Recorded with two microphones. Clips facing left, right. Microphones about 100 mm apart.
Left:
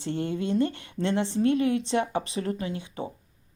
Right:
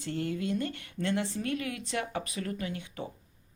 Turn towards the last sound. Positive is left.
turn(degrees=25)  # may be behind; listen again after turning